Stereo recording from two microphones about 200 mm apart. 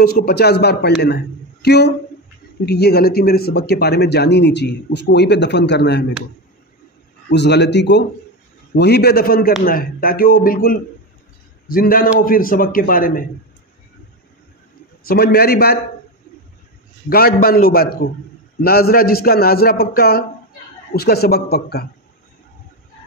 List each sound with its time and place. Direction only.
0.0 s a man's voice: 50° left (ahead or behind)
7.2 s a man's voice: 60° left (ahead or behind)
15.0 s a man's voice: 50° left (ahead or behind)
17.1 s a man's voice: 50° left (ahead or behind)